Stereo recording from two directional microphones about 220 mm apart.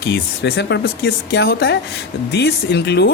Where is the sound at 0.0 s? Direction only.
50° left (ahead or behind).